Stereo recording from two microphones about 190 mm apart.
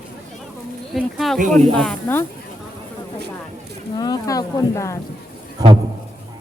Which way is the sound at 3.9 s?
20° left (ahead or behind).